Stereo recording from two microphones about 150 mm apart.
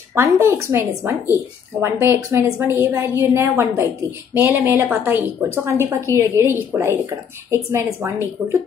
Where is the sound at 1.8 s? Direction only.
15° right (ahead or behind).